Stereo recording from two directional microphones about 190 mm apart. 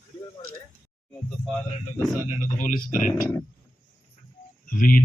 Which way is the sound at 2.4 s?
45° left (ahead or behind).